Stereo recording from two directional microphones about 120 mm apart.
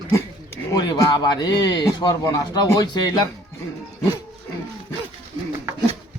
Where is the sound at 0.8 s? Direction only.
30° left (ahead or behind).